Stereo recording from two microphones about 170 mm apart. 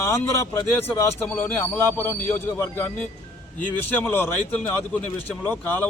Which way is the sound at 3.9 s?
10° left (ahead or behind).